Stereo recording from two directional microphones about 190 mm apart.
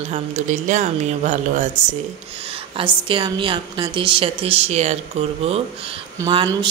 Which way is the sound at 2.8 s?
25° right (ahead or behind).